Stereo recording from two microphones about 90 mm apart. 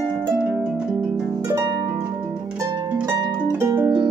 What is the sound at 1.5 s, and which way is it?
Harp, 45° right (ahead or behind).